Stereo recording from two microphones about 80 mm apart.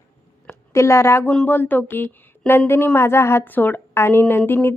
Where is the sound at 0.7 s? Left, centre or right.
Left.